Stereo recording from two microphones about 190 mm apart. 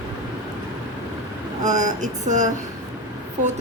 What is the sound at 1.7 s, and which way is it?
Speech, 40° right (ahead or behind).